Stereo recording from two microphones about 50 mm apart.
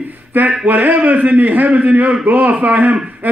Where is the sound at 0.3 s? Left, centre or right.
Right.